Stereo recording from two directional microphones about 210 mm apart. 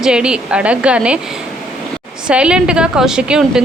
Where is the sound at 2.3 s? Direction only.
5° right (ahead or behind).